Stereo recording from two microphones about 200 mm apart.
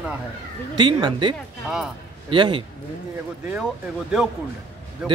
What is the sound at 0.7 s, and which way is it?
A man's voice, 20° right (ahead or behind).